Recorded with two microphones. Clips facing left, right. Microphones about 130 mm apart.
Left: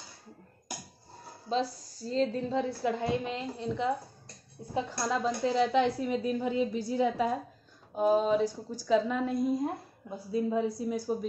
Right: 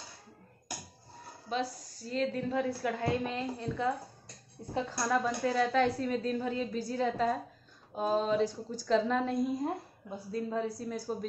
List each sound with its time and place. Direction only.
1.5 s a woman's voice: 30° left (ahead or behind); by 11.2 s 15° left (ahead or behind)